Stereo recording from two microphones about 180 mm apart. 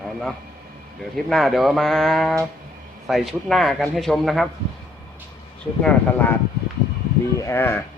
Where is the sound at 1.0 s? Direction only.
Centre (ahead or behind).